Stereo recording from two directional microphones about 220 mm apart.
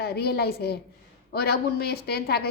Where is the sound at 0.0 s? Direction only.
45° left (ahead or behind).